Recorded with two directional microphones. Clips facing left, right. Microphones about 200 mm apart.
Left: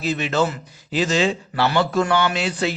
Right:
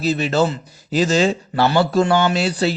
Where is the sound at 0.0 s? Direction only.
35° right (ahead or behind).